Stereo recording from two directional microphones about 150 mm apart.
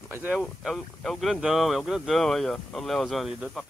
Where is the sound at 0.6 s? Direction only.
Centre (ahead or behind).